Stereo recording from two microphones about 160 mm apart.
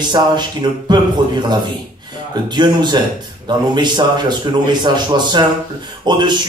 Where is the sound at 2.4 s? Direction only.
25° right (ahead or behind).